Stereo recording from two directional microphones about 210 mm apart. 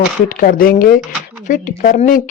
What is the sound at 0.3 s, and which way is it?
Speech, 40° left (ahead or behind).